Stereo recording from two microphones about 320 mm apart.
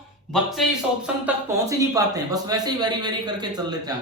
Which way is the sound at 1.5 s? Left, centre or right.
Centre.